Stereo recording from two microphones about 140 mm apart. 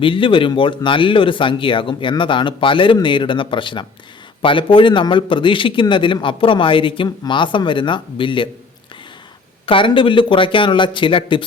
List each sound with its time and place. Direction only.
0.0 s a man's voice: 35° left (ahead or behind)
9.6 s a man's voice: 35° left (ahead or behind)